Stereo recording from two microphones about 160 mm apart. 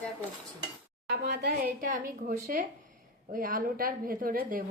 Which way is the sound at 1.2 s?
80° right.